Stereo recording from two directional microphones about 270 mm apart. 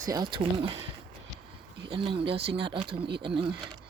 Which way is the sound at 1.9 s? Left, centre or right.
Centre.